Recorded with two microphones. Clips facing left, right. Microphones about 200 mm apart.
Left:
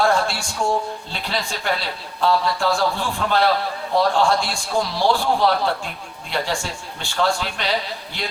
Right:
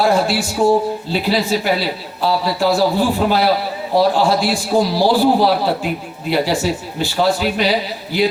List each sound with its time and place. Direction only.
0.0 s a man's voice: 5° right (ahead or behind)
4.7 s speech: 35° right (ahead or behind)
5.5 s a man's voice: 5° right (ahead or behind)